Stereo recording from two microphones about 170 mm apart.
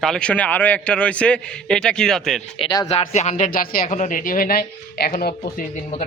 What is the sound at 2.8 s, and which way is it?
Speech, 40° left (ahead or behind).